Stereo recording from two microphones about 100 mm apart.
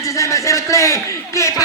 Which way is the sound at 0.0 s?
30° left (ahead or behind).